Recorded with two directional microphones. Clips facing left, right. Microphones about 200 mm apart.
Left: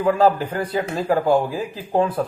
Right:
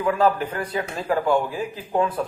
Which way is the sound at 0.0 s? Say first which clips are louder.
Left 3 dB; 30° left (ahead or behind).